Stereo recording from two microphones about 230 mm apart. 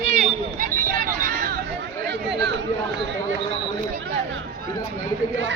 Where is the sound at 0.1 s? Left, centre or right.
Right.